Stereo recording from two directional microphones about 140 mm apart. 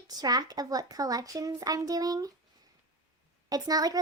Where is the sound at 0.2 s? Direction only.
25° right (ahead or behind).